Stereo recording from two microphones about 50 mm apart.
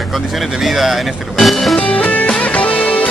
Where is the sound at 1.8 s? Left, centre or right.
Left.